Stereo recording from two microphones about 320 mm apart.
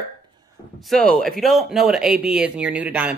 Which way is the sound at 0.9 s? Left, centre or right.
Centre.